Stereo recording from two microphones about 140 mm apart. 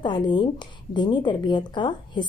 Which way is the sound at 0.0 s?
30° left (ahead or behind).